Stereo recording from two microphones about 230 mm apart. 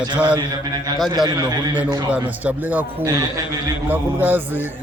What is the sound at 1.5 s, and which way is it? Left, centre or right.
A man's voice, centre.